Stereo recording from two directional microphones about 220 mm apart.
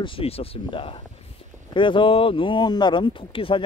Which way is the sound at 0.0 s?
25° left (ahead or behind).